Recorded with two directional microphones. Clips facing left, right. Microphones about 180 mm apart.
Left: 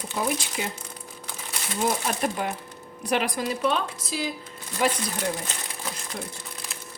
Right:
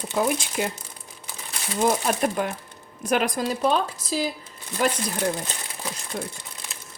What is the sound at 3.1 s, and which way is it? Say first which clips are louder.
Speech: right 2 dB; 45° right (ahead or behind).